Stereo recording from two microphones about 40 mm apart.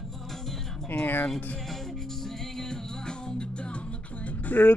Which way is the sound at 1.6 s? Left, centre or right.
Centre.